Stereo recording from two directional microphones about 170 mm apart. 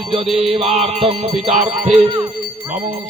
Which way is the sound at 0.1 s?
35° right (ahead or behind).